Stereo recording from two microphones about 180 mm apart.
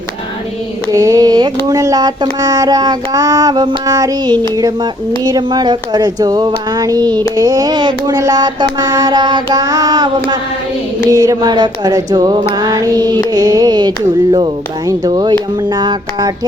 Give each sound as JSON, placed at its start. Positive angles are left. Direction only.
{"t": 0.9, "sound": "speech", "side_deg": -20}
{"t": 11.1, "sound": "speech", "side_deg": -20}